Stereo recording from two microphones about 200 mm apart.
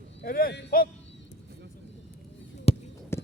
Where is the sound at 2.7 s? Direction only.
30° left (ahead or behind).